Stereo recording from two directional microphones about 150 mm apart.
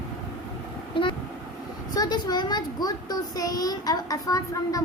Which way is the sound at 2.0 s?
30° left (ahead or behind).